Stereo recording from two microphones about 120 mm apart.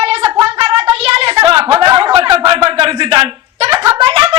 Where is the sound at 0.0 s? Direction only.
50° right (ahead or behind).